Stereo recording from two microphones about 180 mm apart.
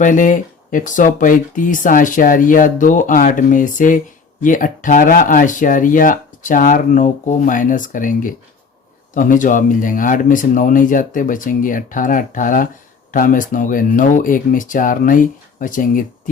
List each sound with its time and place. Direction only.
0.0 s speech: 45° left (ahead or behind)